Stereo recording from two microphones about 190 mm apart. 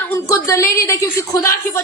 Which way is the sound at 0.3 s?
15° left (ahead or behind).